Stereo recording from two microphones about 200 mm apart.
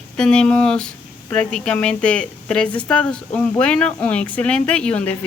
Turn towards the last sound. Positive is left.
turn(degrees=5)  # may be behind; listen again after turning